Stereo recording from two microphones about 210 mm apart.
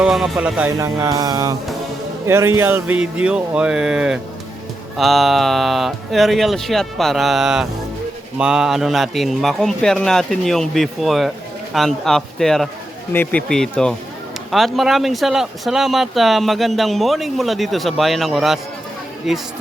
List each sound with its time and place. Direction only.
0.0 s speech: centre (ahead or behind)
0.8 s speech: 15° right (ahead or behind)